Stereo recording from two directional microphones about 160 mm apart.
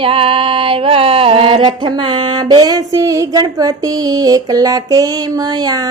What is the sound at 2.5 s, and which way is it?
Music, 25° right (ahead or behind).